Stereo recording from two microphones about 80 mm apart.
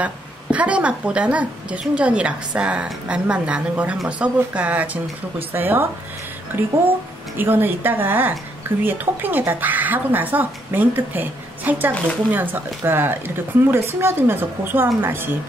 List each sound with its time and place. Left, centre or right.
0.0 s a woman's voice: centre
7.3 s speech: right